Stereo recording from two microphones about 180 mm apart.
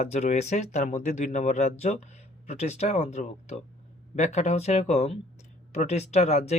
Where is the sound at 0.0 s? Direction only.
40° left (ahead or behind).